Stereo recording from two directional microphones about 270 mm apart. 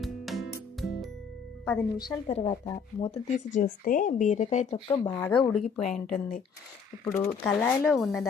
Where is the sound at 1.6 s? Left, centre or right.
Centre.